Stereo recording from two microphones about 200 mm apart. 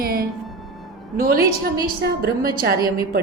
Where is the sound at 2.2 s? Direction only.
50° right (ahead or behind).